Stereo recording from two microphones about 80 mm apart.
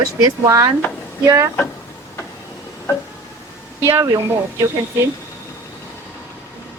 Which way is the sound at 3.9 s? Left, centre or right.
Right.